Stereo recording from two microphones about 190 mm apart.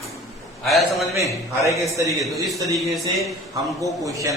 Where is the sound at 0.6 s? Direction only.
Centre (ahead or behind).